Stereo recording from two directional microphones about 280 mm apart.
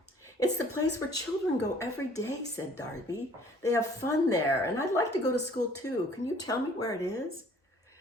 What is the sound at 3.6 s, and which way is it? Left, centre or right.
Speech, centre.